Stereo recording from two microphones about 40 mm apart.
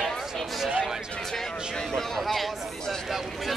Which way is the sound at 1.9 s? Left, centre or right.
Centre.